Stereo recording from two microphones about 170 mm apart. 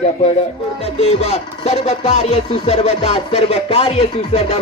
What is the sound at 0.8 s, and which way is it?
Speech, 35° left (ahead or behind).